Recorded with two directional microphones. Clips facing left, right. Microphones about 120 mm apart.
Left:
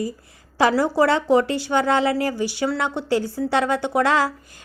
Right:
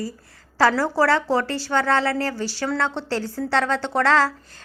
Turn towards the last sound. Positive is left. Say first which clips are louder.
# even
turn(degrees=15)  # may be behind; listen again after turning